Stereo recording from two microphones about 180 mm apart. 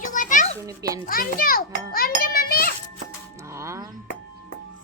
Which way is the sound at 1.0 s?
55° left (ahead or behind).